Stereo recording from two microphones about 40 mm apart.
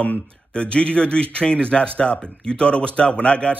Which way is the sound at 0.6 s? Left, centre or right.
Left.